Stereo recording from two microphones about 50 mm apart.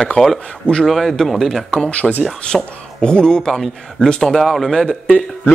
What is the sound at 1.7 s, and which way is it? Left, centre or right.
A man's voice, centre.